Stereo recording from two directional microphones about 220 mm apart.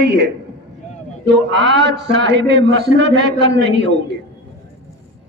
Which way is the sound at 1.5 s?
50° right (ahead or behind).